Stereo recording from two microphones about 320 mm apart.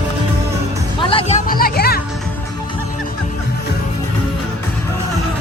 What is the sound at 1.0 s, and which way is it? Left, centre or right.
Music, centre.